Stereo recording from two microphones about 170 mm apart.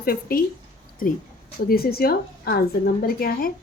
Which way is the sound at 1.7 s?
65° left (ahead or behind).